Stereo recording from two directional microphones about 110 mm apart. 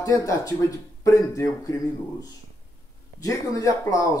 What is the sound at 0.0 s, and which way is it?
Speech, 30° left (ahead or behind).